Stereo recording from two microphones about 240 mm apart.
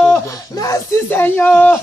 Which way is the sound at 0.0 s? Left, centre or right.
Centre.